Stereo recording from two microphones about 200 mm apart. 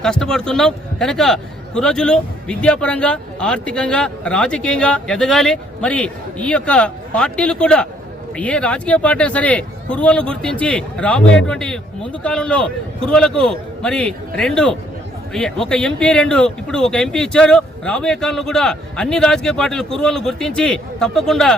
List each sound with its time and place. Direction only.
0.0 s a man's voice: 5° left (ahead or behind)